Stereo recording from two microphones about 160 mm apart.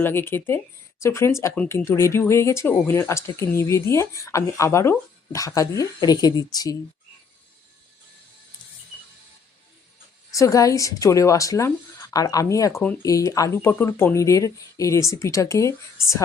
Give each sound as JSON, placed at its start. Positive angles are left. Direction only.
{"t": 0.0, "sound": "speech", "side_deg": 15}
{"t": 10.3, "sound": "speech", "side_deg": 20}